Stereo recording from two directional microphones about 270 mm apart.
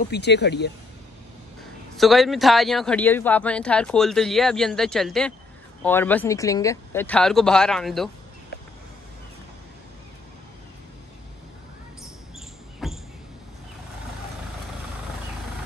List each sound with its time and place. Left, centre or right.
0.1 s speech: left
2.0 s speech: centre
12.8 s a sound: centre